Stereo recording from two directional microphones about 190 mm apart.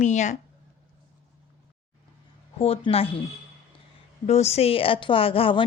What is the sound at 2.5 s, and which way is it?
Speech, 30° left (ahead or behind).